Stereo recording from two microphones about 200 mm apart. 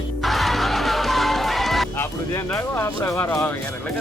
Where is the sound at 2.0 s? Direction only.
15° left (ahead or behind).